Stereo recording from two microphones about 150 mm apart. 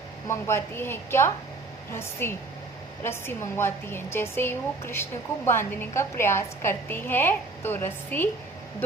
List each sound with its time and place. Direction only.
0.3 s a woman's voice: 15° left (ahead or behind)